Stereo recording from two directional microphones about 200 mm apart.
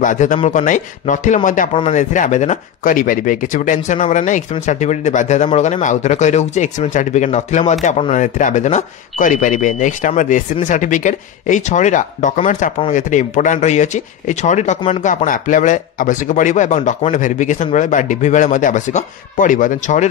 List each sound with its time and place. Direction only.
0.0 s speech: 40° left (ahead or behind)